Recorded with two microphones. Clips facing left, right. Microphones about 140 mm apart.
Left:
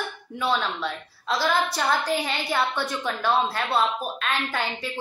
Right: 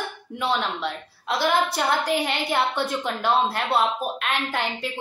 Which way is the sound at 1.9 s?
20° right (ahead or behind).